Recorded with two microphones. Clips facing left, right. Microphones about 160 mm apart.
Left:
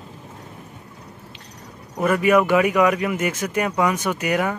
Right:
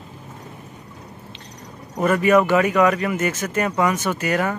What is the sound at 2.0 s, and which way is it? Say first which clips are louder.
Speech: right 1 dB; 10° left (ahead or behind).